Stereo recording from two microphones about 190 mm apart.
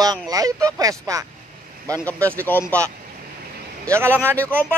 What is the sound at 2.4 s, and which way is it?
Speech, 10° left (ahead or behind).